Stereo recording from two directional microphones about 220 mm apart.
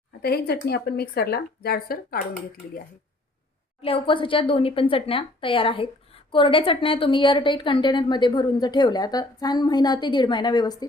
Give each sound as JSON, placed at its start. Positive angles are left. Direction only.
{"t": 0.2, "sound": "speech", "side_deg": 45}
{"t": 3.8, "sound": "a woman's voice", "side_deg": 25}